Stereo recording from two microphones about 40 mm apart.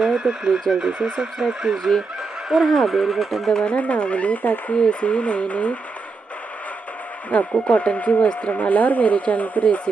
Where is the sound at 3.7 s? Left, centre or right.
Left.